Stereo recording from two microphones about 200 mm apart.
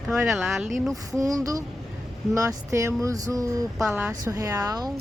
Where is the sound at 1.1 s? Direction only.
15° right (ahead or behind).